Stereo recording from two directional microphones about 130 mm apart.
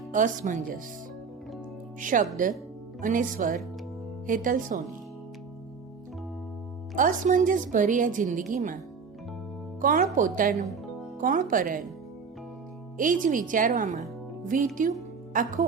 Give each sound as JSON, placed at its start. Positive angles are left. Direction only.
{"t": 0.1, "sound": "a woman's voice", "side_deg": -80}
{"t": 2.0, "sound": "speech", "side_deg": -90}
{"t": 6.9, "sound": "a woman's voice", "side_deg": -90}
{"t": 9.8, "sound": "speech", "side_deg": -90}
{"t": 13.0, "sound": "a woman's voice", "side_deg": -90}